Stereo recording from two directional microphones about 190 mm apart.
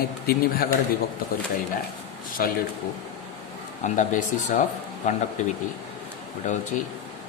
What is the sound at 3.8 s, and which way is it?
Speech, 40° left (ahead or behind).